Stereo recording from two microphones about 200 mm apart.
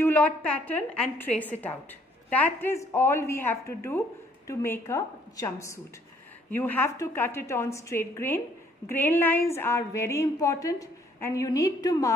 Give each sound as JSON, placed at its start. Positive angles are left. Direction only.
{"t": 0.0, "sound": "a woman's voice", "side_deg": 10}